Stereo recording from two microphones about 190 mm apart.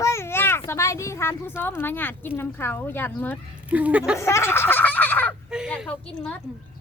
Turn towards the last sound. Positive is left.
turn(degrees=5)  # may be behind; listen again after turning